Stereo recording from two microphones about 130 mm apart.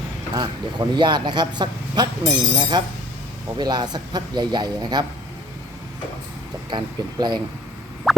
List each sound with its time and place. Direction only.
0.3 s speech: 35° right (ahead or behind)
6.7 s speech: 35° right (ahead or behind)
8.1 s a sound: centre (ahead or behind)